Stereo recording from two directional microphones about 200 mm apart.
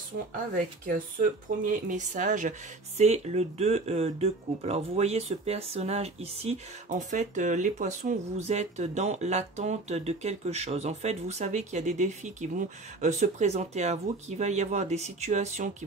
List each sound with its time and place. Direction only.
1.6 s speech: 40° right (ahead or behind)